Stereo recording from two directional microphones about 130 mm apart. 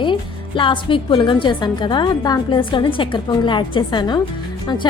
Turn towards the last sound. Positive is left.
turn(degrees=35)  # may be behind; listen again after turning